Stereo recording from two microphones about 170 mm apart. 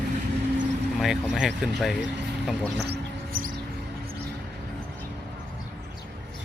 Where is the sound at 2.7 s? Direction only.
75° right (ahead or behind).